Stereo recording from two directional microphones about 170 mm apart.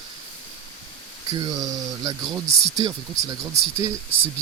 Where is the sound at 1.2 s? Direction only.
25° right (ahead or behind).